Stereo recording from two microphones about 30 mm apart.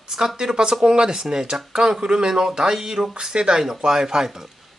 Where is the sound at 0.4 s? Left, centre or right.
Right.